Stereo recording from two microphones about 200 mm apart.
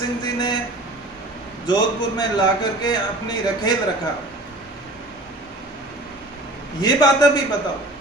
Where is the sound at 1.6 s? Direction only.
20° left (ahead or behind).